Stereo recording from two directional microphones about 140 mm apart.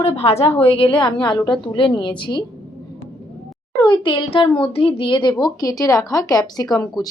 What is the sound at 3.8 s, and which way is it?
A woman's voice, 35° left (ahead or behind).